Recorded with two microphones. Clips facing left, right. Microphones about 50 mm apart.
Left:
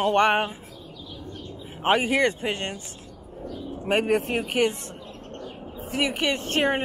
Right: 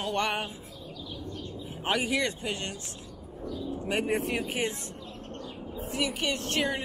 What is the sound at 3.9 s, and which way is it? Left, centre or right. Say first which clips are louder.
Speech: left 7 dB; left.